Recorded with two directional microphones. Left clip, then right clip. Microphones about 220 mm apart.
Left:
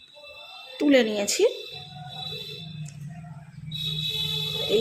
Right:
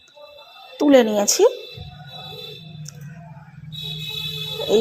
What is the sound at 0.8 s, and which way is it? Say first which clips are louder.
Speech: right 6 dB; 10° right (ahead or behind).